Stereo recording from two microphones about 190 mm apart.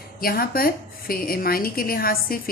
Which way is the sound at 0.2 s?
50° left (ahead or behind).